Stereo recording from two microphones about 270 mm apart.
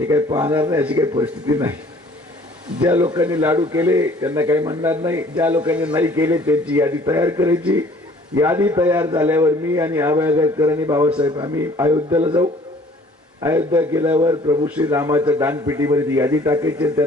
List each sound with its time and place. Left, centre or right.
0.1 s a man's voice: centre
2.8 s a man's voice: centre